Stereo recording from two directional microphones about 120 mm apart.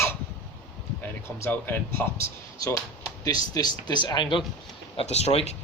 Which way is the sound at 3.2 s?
30° left (ahead or behind).